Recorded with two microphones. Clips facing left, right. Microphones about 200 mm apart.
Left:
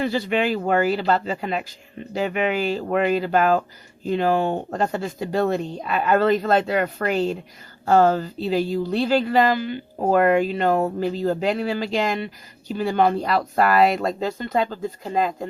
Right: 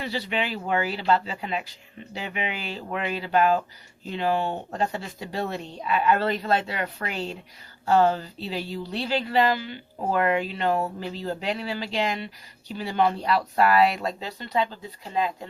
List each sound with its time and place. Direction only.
0.0 s speech: 45° left (ahead or behind)